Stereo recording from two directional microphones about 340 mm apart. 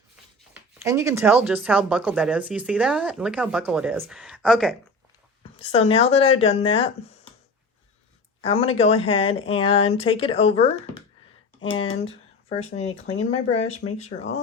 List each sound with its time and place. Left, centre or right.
0.5 s speech: centre
5.4 s a woman's voice: centre
8.4 s speech: centre
11.8 s speech: centre